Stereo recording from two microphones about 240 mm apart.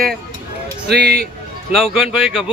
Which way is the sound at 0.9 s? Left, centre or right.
Right.